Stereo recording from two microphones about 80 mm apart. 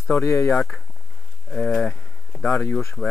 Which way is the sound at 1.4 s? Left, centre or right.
Centre.